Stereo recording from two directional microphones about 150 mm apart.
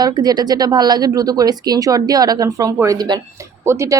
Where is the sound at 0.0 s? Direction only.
25° right (ahead or behind).